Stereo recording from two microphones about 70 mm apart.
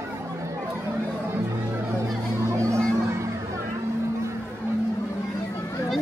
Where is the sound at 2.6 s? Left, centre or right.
Right.